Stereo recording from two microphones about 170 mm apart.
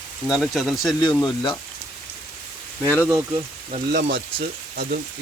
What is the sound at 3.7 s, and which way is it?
Speech, 55° right (ahead or behind).